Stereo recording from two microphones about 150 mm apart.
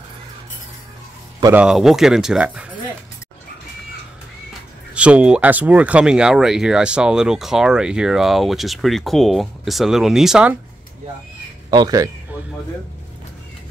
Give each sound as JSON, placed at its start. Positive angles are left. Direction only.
{"t": 1.5, "sound": "speech", "side_deg": -5}
{"t": 4.9, "sound": "speech", "side_deg": -10}
{"t": 11.7, "sound": "speech", "side_deg": -25}